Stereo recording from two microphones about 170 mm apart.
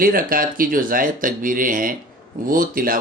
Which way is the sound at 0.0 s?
60° right (ahead or behind).